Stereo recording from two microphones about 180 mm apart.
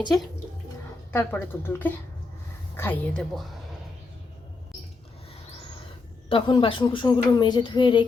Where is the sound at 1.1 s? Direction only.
10° left (ahead or behind).